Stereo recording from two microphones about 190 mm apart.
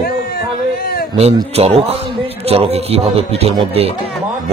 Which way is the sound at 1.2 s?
30° right (ahead or behind).